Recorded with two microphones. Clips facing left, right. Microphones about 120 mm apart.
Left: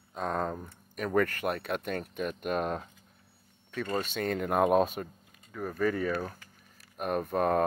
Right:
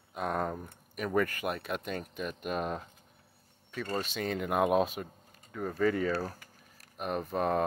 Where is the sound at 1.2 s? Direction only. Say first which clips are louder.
Left 3 dB; 55° left (ahead or behind).